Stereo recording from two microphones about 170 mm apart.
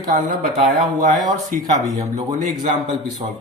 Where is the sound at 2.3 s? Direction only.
45° right (ahead or behind).